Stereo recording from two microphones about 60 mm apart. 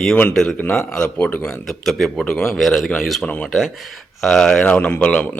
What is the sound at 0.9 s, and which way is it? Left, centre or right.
Speech, centre.